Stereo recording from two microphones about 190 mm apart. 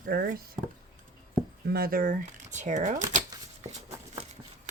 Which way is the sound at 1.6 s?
55° right (ahead or behind).